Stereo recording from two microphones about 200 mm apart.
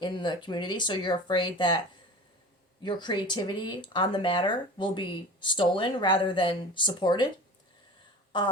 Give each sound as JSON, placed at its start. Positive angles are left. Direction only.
{"t": 0.0, "sound": "speech", "side_deg": 25}
{"t": 2.8, "sound": "speech", "side_deg": 20}